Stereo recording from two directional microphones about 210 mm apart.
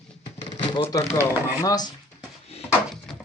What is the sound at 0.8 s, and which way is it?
Speech, 15° left (ahead or behind).